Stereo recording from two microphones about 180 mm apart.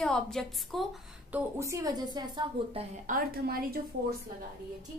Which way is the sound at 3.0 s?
55° right (ahead or behind).